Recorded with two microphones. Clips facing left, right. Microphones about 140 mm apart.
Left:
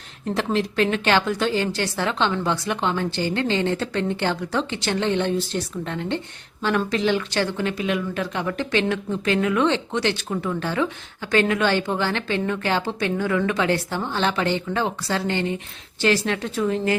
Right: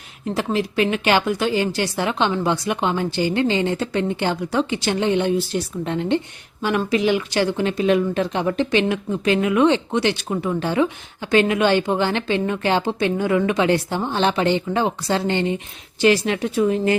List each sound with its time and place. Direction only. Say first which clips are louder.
0.3 s speech: right 1 dB; 5° right (ahead or behind)